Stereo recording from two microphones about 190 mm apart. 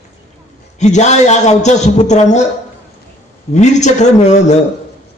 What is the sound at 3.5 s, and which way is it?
A man's voice, 40° left (ahead or behind).